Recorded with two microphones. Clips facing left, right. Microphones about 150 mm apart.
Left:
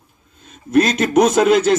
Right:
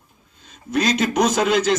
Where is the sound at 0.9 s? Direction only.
55° left (ahead or behind).